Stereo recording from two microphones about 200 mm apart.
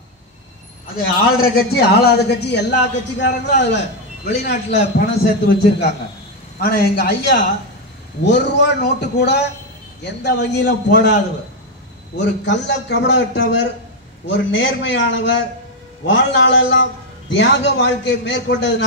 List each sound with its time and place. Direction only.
1.4 s a man's voice: 50° left (ahead or behind)
12.2 s a man's voice: 60° left (ahead or behind)